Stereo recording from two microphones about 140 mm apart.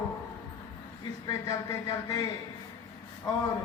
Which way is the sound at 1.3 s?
30° left (ahead or behind).